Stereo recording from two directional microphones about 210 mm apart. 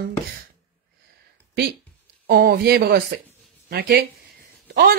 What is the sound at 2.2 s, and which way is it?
Speech, 45° right (ahead or behind).